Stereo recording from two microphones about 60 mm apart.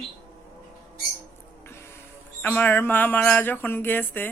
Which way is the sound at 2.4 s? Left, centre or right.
Left.